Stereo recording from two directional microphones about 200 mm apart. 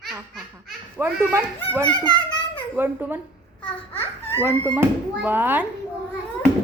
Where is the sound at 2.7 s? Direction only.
10° right (ahead or behind).